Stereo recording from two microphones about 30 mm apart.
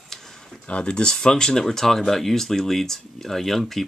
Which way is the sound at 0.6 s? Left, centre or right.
Left.